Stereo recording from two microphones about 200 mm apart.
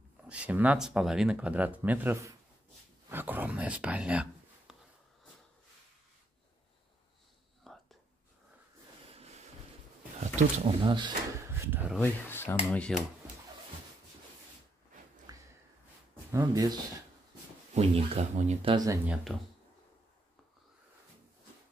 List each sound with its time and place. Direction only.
0.3 s speech: 5° right (ahead or behind)
3.1 s a sound: 10° right (ahead or behind)
7.6 s whispering: centre (ahead or behind)
9.1 s vehicle: 30° right (ahead or behind)
10.2 s speech: 35° right (ahead or behind)
11.5 s a sound: 10° right (ahead or behind)
12.0 s speech: 10° left (ahead or behind)
15.3 s a sound: 20° right (ahead or behind)
16.3 s speech: 15° right (ahead or behind)
17.7 s speech: 30° right (ahead or behind)
19.3 s speech: 5° right (ahead or behind)